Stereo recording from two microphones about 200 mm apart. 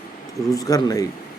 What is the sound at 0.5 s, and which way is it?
Speech, 15° left (ahead or behind).